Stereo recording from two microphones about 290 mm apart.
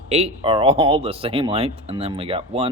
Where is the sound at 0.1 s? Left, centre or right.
Right.